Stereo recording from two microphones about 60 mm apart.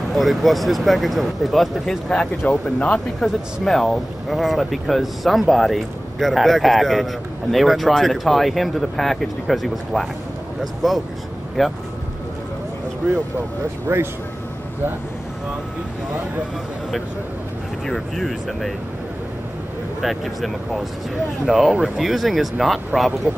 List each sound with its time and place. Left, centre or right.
0.1 s speech: centre
2.4 s speech: centre
3.6 s speech: centre
13.9 s speech: right
17.8 s speech: centre
20.0 s speech: centre